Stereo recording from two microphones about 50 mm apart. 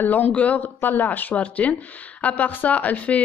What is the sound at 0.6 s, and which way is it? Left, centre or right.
Speech, left.